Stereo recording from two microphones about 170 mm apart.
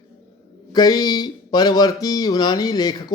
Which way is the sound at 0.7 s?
25° left (ahead or behind).